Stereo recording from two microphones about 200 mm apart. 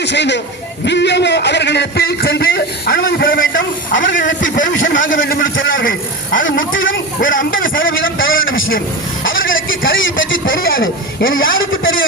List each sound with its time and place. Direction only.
0.0 s a man's voice: 60° left (ahead or behind)
3.6 s a man's voice: 70° left (ahead or behind)
4.4 s speech: 40° left (ahead or behind)
4.9 s a man's voice: 70° left (ahead or behind)
6.4 s a man's voice: 70° left (ahead or behind)
7.2 s speech: 45° left (ahead or behind)
7.8 s a sound: 75° left (ahead or behind)
9.2 s a man's voice: 75° left (ahead or behind)